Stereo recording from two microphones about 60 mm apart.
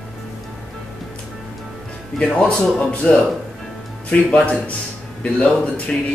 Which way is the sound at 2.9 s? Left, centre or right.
Left.